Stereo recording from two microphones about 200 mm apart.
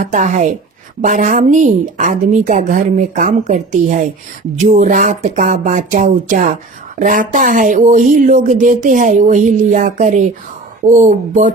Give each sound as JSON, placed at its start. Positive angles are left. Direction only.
{"t": 0.0, "sound": "speech", "side_deg": -40}